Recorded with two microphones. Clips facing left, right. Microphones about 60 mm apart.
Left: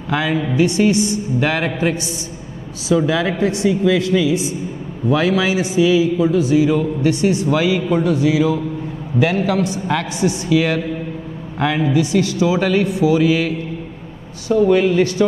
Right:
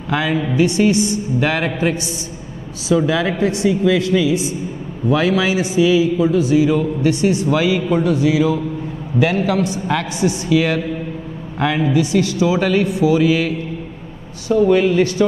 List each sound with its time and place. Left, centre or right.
0.1 s a man's voice: centre
14.5 s a man's voice: centre